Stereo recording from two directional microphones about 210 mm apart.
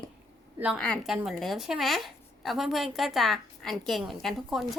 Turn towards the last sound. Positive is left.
turn(degrees=0)  # may be behind; listen again after turning